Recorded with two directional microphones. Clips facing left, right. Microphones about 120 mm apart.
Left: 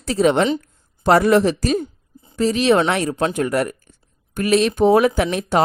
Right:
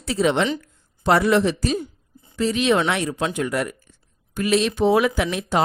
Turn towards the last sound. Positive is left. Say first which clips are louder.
# left 3 dB
turn(degrees=45)  # may be behind; listen again after turning